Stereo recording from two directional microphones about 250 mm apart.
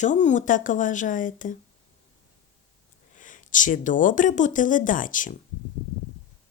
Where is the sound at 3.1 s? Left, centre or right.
Left.